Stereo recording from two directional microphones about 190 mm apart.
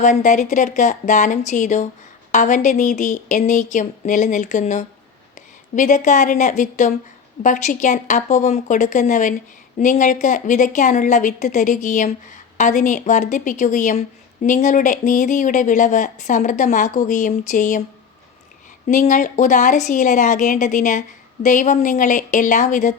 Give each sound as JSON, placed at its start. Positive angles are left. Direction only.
{"t": 0.0, "sound": "speech", "side_deg": 40}
{"t": 18.9, "sound": "speech", "side_deg": 40}